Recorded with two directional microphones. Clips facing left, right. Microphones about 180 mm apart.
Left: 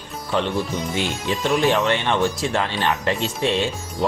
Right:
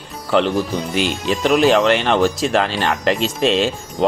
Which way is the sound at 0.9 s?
85° right.